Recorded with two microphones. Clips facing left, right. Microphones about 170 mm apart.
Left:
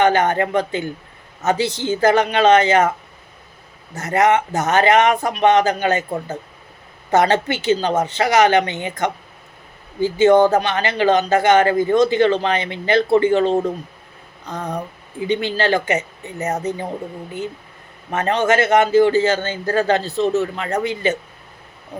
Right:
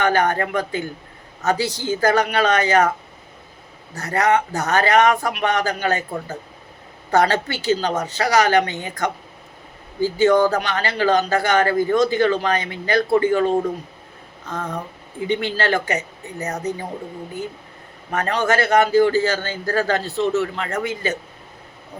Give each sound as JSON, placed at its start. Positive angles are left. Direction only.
{"t": 0.0, "sound": "speech", "side_deg": 20}
{"t": 3.9, "sound": "speech", "side_deg": 20}
{"t": 14.4, "sound": "a sound", "side_deg": 15}
{"t": 15.3, "sound": "speech", "side_deg": 15}
{"t": 18.1, "sound": "speech", "side_deg": 20}